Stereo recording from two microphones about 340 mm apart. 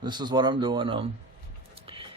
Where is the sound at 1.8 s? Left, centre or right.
Centre.